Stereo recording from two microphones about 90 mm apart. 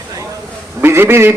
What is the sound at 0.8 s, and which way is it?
Speech, 25° right (ahead or behind).